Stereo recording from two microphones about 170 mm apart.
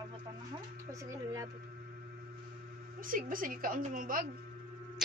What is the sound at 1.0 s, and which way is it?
Speech, 20° right (ahead or behind).